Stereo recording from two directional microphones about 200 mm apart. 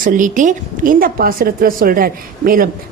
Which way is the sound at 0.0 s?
40° right (ahead or behind).